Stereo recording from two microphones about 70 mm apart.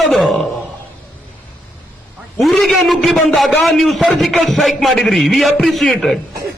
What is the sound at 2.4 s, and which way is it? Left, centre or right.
A man's voice, centre.